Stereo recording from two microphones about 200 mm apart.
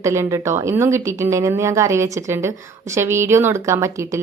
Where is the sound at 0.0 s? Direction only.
15° right (ahead or behind).